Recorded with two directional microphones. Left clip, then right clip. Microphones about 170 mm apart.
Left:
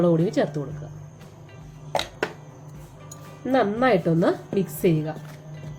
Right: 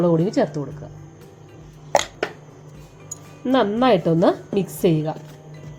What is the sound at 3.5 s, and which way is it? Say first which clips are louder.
Speech: right 3 dB; 50° right (ahead or behind).